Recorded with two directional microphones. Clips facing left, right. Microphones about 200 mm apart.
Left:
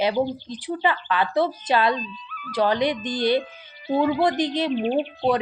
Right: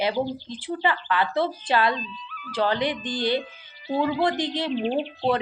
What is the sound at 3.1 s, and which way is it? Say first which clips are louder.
Speech: left 4 dB; 20° right (ahead or behind).